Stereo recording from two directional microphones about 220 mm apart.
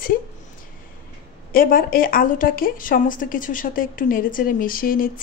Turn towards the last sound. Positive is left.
turn(degrees=40)  # may be behind; listen again after turning